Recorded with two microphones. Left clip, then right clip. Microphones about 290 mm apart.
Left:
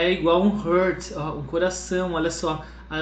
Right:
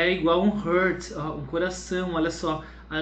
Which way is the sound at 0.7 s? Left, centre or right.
Centre.